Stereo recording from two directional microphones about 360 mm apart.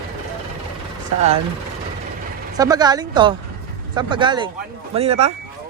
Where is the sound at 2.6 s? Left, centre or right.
Centre.